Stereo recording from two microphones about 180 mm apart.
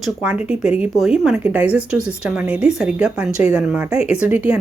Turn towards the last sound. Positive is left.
turn(degrees=-10)  # may be behind; listen again after turning